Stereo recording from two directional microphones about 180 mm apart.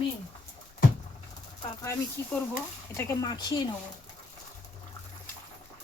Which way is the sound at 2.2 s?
15° left (ahead or behind).